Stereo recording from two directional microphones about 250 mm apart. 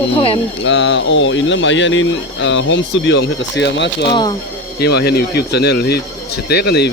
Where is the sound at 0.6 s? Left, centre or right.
Left.